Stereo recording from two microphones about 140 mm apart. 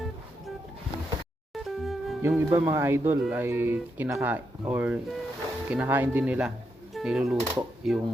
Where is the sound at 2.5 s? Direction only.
20° right (ahead or behind).